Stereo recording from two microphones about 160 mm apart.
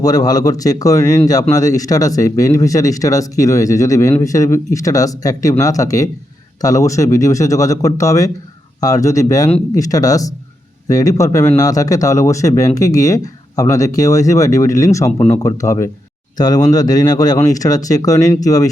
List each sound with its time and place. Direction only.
0.0 s speech: 25° left (ahead or behind)